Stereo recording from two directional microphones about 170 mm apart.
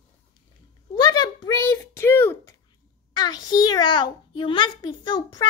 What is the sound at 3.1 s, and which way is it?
A child's voice, 25° left (ahead or behind).